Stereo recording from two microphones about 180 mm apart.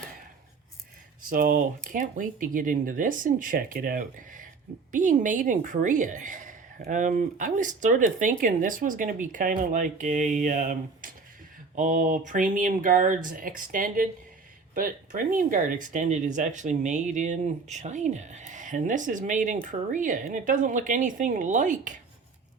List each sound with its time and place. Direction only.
1.3 s speech: 50° right (ahead or behind)